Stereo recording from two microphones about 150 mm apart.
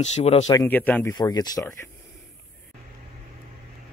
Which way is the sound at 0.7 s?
10° left (ahead or behind).